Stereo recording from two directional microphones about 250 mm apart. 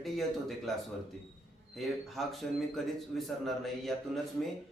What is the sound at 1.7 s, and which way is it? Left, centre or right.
A man's voice, centre.